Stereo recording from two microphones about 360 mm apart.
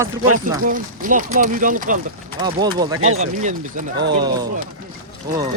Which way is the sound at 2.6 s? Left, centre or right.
Centre.